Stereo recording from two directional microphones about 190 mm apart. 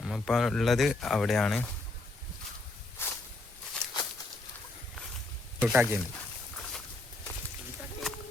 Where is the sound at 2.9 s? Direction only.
10° left (ahead or behind).